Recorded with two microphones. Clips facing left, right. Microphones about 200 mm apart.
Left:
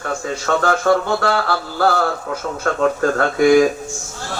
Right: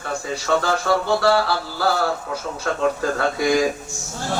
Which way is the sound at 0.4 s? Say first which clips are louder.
Left 4 dB; 50° left (ahead or behind).